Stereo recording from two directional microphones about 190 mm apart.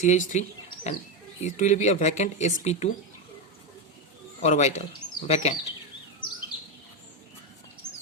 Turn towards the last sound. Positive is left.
turn(degrees=20)  # may be behind; listen again after turning